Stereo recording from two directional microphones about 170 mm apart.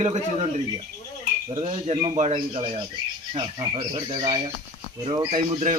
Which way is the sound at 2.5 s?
30° right (ahead or behind).